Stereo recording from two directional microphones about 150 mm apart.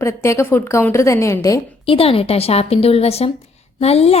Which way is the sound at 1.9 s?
40° left (ahead or behind).